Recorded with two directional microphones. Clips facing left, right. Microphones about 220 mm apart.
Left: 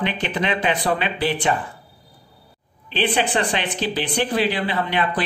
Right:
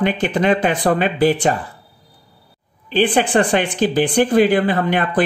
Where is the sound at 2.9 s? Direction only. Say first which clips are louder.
Right 6 dB; 50° right (ahead or behind).